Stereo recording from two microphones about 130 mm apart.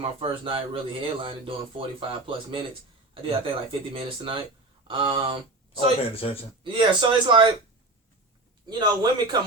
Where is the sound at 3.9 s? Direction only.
40° right (ahead or behind).